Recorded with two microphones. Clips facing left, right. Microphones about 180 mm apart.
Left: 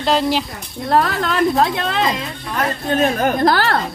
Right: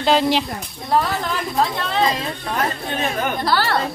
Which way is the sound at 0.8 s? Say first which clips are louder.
Left 3 dB; 75° left (ahead or behind).